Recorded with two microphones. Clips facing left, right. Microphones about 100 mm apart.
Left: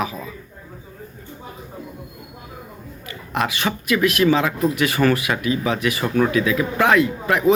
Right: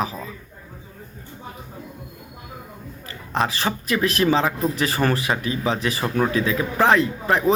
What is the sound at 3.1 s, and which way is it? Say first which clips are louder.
A man's voice: even; 35° right (ahead or behind).